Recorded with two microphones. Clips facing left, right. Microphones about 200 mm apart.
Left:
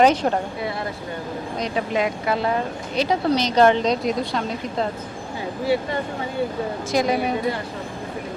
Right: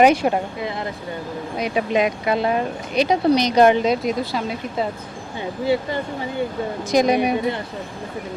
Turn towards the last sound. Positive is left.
turn(degrees=-15)  # may be behind; listen again after turning